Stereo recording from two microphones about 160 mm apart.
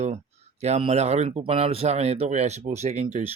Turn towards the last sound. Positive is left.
turn(degrees=-45)  # may be behind; listen again after turning